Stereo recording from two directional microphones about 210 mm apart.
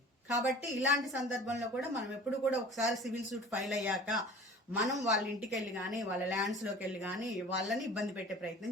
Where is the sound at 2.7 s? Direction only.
Centre (ahead or behind).